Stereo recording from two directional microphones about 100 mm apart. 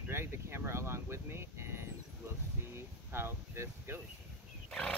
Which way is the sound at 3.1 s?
25° right (ahead or behind).